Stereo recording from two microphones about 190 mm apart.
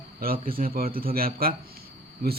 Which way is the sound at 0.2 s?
50° right (ahead or behind).